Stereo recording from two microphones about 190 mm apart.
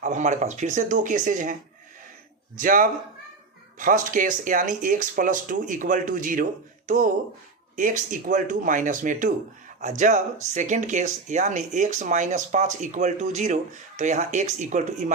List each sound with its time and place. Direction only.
0.0 s speech: 40° right (ahead or behind)
2.6 s speech: 45° right (ahead or behind)